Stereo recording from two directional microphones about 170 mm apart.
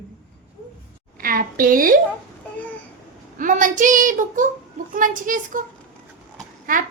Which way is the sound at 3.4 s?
50° right (ahead or behind).